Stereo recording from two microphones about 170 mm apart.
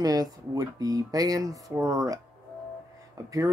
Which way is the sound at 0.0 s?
20° right (ahead or behind).